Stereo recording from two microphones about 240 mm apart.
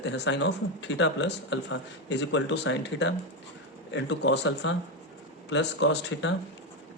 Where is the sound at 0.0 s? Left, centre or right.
Left.